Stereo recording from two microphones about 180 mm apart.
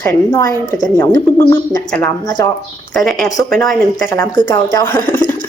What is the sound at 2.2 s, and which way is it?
Speech, 25° left (ahead or behind).